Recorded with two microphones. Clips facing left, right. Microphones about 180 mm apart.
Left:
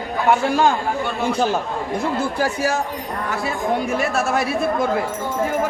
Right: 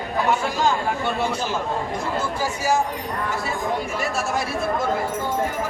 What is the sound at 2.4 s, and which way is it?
Speech, 60° left (ahead or behind).